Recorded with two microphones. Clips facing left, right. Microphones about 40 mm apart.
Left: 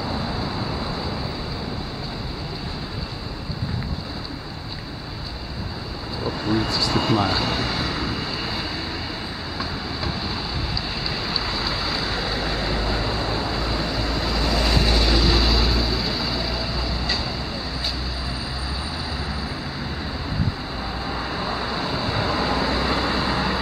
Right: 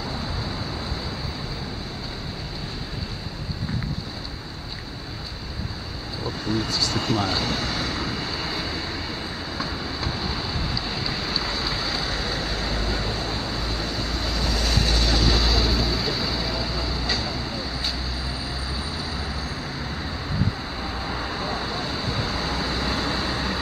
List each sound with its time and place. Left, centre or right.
6.2 s vehicle: centre
9.6 s train: centre
11.1 s vehicle: centre
21.0 s vehicle: centre